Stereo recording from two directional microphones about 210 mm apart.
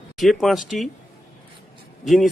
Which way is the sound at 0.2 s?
Centre (ahead or behind).